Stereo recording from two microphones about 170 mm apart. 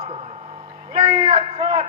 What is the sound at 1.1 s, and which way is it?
Speech, 35° right (ahead or behind).